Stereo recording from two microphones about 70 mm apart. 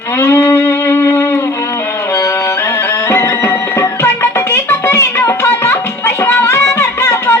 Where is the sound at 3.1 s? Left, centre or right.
Left.